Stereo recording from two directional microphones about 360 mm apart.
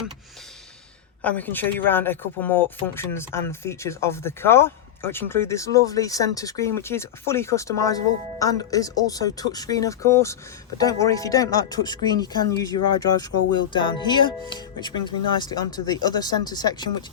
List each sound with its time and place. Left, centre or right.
1.2 s speech: centre
13.7 s speech: centre